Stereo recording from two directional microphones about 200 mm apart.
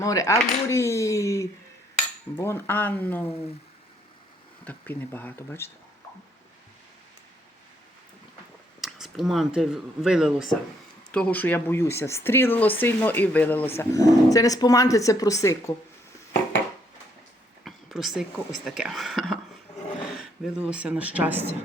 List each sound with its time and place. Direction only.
0.0 s speech: 15° left (ahead or behind)
4.6 s speech: 10° left (ahead or behind)
8.8 s speech: centre (ahead or behind); by 15.7 s 15° left (ahead or behind)
17.7 s speech: centre (ahead or behind)